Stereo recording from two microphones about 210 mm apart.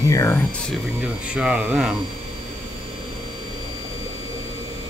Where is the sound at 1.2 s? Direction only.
5° right (ahead or behind).